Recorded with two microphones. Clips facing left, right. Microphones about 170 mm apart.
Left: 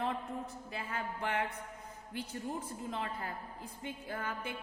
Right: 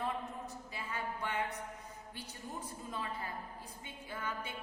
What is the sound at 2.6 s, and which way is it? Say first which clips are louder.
Music: left 3 dB; 50° left (ahead or behind).